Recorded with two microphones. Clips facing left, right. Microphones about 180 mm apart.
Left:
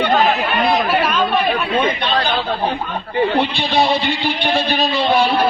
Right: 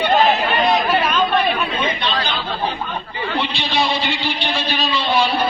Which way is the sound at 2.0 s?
55° left (ahead or behind).